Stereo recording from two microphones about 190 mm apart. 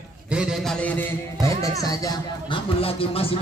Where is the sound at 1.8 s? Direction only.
20° left (ahead or behind).